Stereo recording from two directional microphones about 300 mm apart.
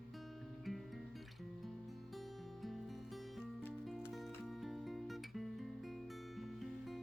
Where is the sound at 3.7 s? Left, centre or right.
Centre.